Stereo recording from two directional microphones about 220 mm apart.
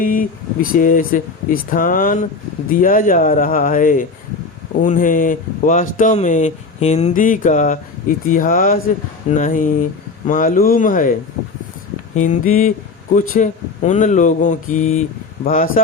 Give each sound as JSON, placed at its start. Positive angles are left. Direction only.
{"t": 0.0, "sound": "speech", "side_deg": 40}
{"t": 12.1, "sound": "speech", "side_deg": 35}